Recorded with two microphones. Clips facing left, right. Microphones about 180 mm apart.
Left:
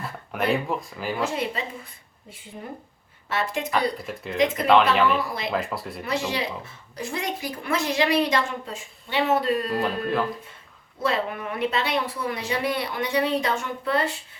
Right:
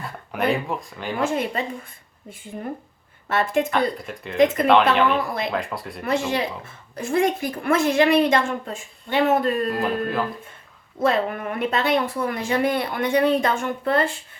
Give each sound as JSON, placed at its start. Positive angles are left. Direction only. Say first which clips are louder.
{"t": 0.0, "sound": "speech", "louder": "right 3 dB", "side_deg": 0}
{"t": 1.2, "sound": "speech", "louder": "right 5 dB", "side_deg": -50}
{"t": 3.2, "sound": "speech", "louder": "right 6 dB", "side_deg": -50}
{"t": 3.7, "sound": "speech", "louder": "right 2 dB", "side_deg": 0}
{"t": 6.1, "sound": "speech", "louder": "right 4 dB", "side_deg": -50}
{"t": 9.7, "sound": "speech", "louder": "right 1 dB", "side_deg": 0}
{"t": 11.0, "sound": "speech", "louder": "right 4 dB", "side_deg": -50}